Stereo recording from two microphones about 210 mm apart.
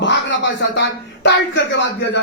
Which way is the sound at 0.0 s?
60° left (ahead or behind).